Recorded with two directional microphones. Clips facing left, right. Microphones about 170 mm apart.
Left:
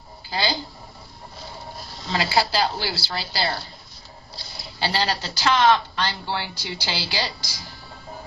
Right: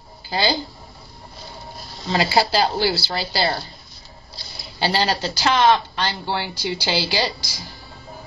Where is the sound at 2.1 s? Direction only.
25° right (ahead or behind).